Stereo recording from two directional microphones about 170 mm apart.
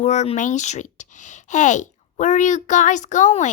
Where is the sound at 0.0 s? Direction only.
45° left (ahead or behind).